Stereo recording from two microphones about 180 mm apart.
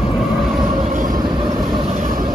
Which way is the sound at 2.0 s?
50° right (ahead or behind).